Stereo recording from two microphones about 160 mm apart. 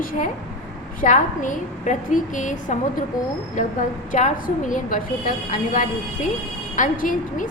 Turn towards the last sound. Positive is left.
turn(degrees=55)  # may be behind; listen again after turning